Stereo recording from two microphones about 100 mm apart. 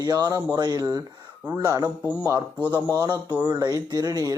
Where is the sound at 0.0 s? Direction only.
40° right (ahead or behind).